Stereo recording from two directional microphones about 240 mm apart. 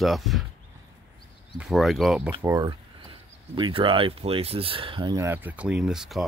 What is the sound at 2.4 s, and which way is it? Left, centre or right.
Speech, centre.